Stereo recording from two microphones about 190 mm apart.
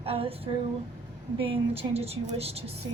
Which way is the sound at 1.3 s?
30° right (ahead or behind).